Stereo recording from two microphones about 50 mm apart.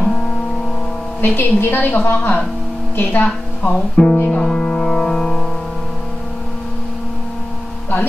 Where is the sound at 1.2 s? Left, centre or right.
Left.